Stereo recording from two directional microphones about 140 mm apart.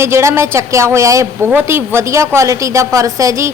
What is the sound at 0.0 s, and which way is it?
A woman's voice, 20° right (ahead or behind).